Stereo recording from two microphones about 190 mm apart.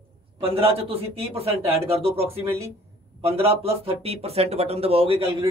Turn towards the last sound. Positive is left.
turn(degrees=-30)  # may be behind; listen again after turning